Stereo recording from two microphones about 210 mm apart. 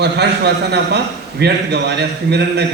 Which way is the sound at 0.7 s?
50° right (ahead or behind).